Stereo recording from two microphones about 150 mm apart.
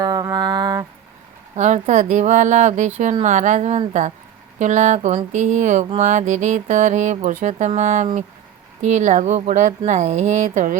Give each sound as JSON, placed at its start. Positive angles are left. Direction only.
{"t": 0.0, "sound": "mantra", "side_deg": -25}
{"t": 1.5, "sound": "speech", "side_deg": -55}